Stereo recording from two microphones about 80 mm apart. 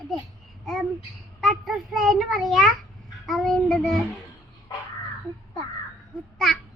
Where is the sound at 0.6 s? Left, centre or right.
Centre.